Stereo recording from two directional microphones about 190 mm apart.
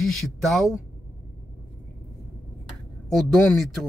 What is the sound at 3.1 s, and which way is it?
Speech, centre (ahead or behind).